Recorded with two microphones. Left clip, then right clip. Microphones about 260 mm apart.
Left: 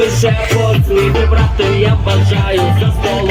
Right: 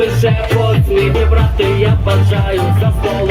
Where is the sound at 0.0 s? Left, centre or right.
Left.